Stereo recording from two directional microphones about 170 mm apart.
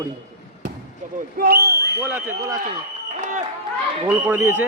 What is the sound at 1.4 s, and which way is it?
Speech, 65° right (ahead or behind).